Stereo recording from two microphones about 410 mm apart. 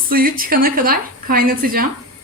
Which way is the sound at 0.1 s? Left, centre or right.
Right.